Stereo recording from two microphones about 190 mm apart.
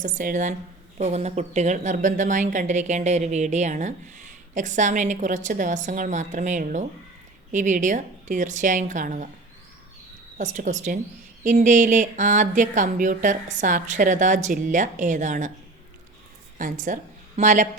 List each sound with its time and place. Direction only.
0.0 s a woman's voice: 45° right (ahead or behind)
10.3 s a woman's voice: 40° right (ahead or behind)
16.6 s a woman's voice: 45° right (ahead or behind)